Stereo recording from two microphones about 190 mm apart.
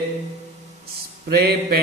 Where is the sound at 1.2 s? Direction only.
55° right (ahead or behind).